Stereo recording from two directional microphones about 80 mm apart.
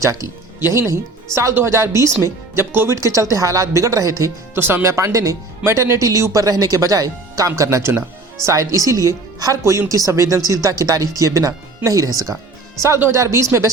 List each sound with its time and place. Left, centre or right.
0.0 s speech: right
4.5 s speech: right